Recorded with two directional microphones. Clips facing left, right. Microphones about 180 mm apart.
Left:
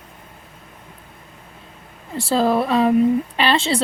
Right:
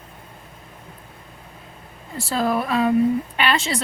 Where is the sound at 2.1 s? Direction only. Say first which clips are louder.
Left 4 dB; 30° left (ahead or behind).